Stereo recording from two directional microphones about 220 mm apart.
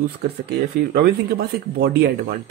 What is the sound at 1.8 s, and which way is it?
Speech, 45° right (ahead or behind).